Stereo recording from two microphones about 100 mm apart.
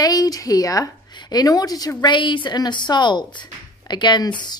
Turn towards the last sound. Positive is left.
turn(degrees=50)  # may be behind; listen again after turning